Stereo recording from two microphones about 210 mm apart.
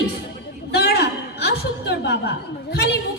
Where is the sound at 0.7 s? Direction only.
50° left (ahead or behind).